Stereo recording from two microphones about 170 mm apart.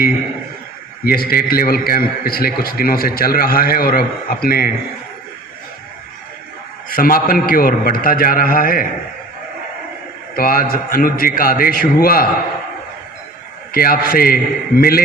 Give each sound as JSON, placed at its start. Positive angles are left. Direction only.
{"t": 1.0, "sound": "a man's voice", "side_deg": 60}
{"t": 6.9, "sound": "a man's voice", "side_deg": 60}
{"t": 10.3, "sound": "a man's voice", "side_deg": 60}
{"t": 13.7, "sound": "a man's voice", "side_deg": 60}